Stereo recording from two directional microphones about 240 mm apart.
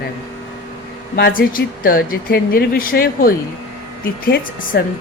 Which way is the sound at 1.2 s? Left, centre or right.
Left.